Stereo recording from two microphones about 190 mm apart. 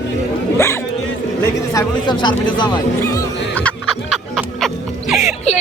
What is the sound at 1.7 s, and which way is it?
Speech, 20° left (ahead or behind).